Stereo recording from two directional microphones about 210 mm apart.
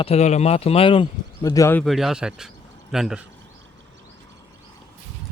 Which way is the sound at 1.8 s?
Centre (ahead or behind).